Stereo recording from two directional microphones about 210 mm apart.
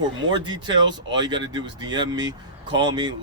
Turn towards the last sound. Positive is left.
turn(degrees=-20)  # may be behind; listen again after turning